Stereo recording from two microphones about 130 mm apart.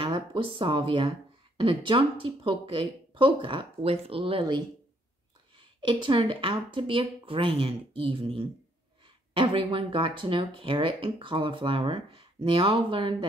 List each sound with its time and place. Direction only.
0.0 s speech: 40° right (ahead or behind)